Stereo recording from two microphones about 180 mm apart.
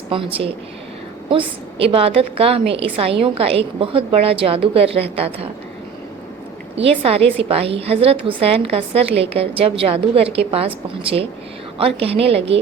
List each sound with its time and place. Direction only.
0.1 s a woman's voice: 30° right (ahead or behind)
6.7 s a woman's voice: 35° right (ahead or behind)